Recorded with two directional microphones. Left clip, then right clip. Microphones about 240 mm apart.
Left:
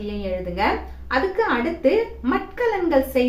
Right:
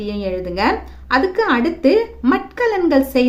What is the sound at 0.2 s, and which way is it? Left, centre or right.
A woman's voice, right.